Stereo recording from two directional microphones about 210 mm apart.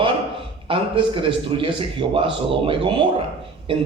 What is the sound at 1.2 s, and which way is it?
A man's voice, 25° right (ahead or behind).